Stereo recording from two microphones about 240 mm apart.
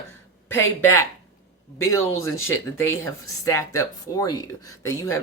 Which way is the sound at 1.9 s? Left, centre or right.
Centre.